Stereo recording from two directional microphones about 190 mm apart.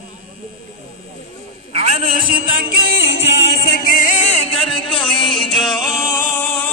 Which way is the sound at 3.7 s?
55° left (ahead or behind).